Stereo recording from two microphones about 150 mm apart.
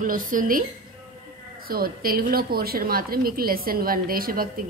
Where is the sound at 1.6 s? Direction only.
80° right.